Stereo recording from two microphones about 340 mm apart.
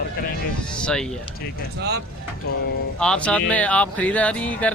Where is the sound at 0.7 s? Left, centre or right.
Centre.